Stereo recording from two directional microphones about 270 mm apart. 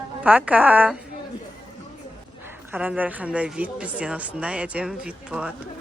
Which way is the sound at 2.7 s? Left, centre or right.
Centre.